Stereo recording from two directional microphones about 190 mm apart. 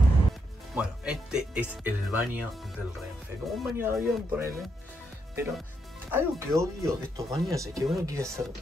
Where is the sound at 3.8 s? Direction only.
10° right (ahead or behind).